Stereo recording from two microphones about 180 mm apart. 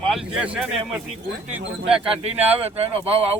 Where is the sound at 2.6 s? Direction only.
30° right (ahead or behind).